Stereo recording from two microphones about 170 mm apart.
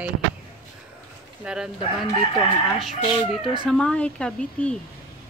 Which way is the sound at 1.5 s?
5° right (ahead or behind).